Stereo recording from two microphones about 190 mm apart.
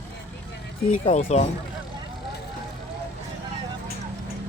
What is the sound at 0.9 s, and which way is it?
Speech, 35° left (ahead or behind).